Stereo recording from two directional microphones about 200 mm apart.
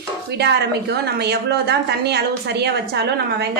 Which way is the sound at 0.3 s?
55° right (ahead or behind).